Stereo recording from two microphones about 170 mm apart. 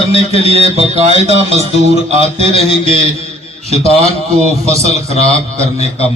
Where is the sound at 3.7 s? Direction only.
40° right (ahead or behind).